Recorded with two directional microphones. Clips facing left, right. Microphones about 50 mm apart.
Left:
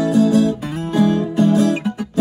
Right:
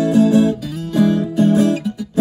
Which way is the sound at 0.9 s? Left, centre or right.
Left.